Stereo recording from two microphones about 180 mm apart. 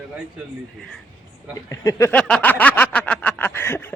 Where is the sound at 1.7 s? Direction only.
15° left (ahead or behind).